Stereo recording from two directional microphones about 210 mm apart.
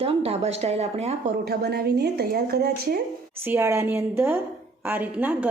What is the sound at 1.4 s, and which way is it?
A woman's voice, 50° right (ahead or behind).